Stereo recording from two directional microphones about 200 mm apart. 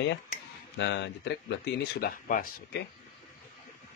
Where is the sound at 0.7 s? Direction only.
60° left (ahead or behind); by 2.8 s 45° left (ahead or behind).